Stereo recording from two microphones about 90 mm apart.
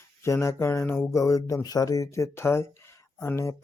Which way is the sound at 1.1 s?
35° left (ahead or behind).